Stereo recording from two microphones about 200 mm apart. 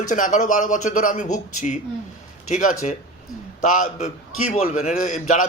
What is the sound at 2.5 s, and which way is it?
A man's voice, 40° left (ahead or behind).